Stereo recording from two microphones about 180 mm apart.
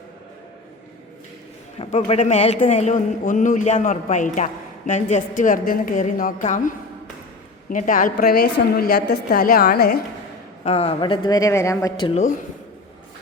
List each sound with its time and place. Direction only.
1.8 s a man's voice: 35° left (ahead or behind); by 10.0 s 60° left (ahead or behind)
10.6 s speech: 35° left (ahead or behind)